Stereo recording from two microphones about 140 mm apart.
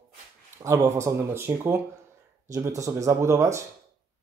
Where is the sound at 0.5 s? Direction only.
20° right (ahead or behind).